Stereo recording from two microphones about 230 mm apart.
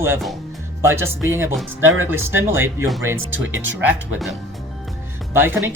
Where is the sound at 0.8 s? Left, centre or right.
Centre.